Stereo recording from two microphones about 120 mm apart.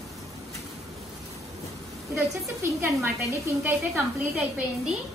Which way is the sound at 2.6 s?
25° right (ahead or behind).